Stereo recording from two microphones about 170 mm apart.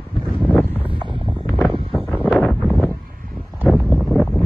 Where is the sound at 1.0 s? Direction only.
30° right (ahead or behind).